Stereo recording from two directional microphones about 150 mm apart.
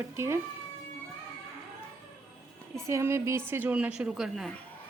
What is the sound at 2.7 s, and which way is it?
A woman's voice, 20° right (ahead or behind).